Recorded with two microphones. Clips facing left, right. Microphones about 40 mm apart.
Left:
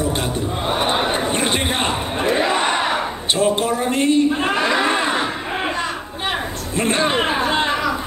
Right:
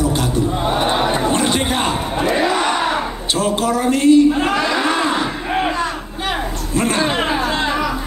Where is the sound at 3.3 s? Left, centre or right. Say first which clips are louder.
Even; left.